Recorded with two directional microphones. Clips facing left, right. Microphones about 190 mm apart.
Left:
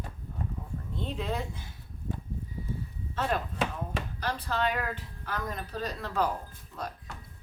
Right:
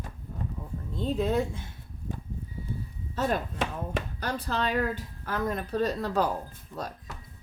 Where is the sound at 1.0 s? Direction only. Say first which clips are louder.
Right 7 dB; 40° right (ahead or behind).